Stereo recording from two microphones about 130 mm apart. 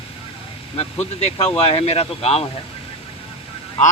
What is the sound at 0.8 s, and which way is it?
Speech, 55° left (ahead or behind).